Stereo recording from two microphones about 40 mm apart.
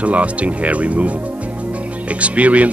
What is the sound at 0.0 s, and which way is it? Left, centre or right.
Speech, right.